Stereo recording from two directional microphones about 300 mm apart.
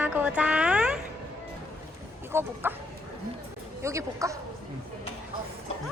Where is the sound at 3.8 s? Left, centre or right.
Centre.